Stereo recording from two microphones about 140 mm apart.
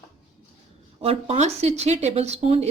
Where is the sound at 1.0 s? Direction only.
45° right (ahead or behind).